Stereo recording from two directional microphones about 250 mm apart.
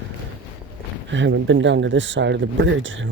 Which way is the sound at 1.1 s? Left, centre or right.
Right.